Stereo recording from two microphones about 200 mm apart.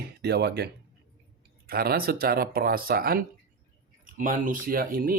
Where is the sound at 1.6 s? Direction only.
50° right (ahead or behind).